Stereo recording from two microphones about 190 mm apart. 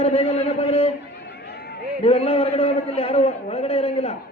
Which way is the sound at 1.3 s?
55° left (ahead or behind).